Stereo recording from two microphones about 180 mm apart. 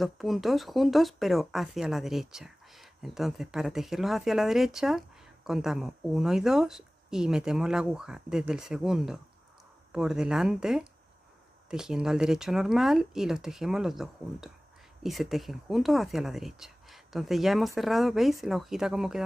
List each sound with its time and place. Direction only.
0.0 s speech: centre (ahead or behind)